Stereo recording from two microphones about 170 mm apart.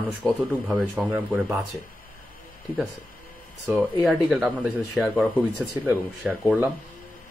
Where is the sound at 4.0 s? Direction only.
Centre (ahead or behind).